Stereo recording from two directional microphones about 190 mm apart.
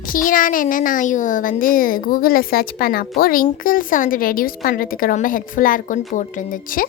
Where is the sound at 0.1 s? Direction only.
45° left (ahead or behind).